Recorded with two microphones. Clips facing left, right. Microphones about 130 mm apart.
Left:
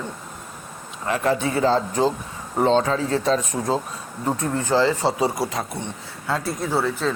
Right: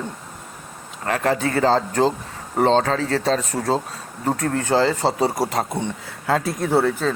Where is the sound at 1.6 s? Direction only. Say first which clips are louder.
Right 2 dB; 90° right.